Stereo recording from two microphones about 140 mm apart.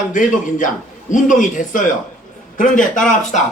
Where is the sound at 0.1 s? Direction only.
70° left (ahead or behind).